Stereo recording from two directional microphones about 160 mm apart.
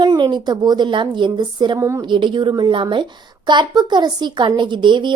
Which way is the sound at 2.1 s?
30° right (ahead or behind).